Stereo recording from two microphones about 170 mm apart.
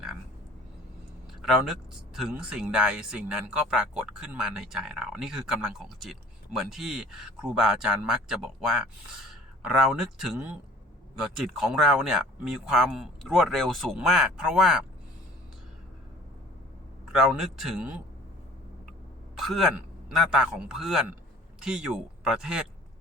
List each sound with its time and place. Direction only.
1.4 s speech: centre (ahead or behind)
17.1 s speech: 5° right (ahead or behind)
19.4 s speech: centre (ahead or behind)